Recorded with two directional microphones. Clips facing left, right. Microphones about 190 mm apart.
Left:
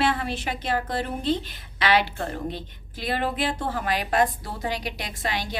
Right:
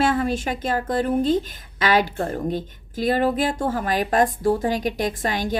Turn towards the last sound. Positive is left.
turn(degrees=-45)  # may be behind; listen again after turning